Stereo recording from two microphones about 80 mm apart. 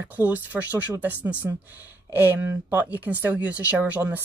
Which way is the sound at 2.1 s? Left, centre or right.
Right.